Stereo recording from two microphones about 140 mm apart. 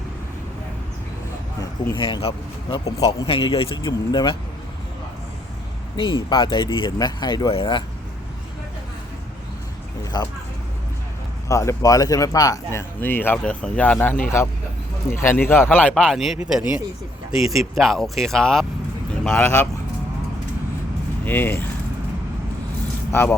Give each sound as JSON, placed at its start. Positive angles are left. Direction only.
{"t": 2.0, "sound": "speech", "side_deg": 35}
{"t": 6.0, "sound": "speech", "side_deg": 35}
{"t": 10.0, "sound": "speech", "side_deg": 30}
{"t": 11.4, "sound": "speech", "side_deg": 20}
{"t": 13.0, "sound": "speech", "side_deg": 15}
{"t": 19.3, "sound": "speech", "side_deg": 15}
{"t": 21.2, "sound": "speech", "side_deg": 15}